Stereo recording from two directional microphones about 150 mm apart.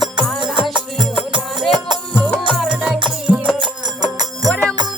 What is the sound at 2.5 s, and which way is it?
Music, 5° right (ahead or behind).